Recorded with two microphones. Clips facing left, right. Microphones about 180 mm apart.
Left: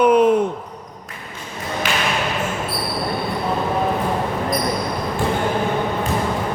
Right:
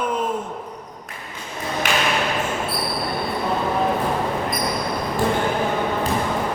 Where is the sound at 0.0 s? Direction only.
75° left (ahead or behind).